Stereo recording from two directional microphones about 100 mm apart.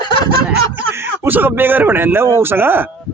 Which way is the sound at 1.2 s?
20° right (ahead or behind).